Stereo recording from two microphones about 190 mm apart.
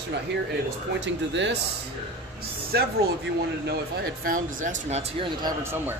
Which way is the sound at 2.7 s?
65° right (ahead or behind).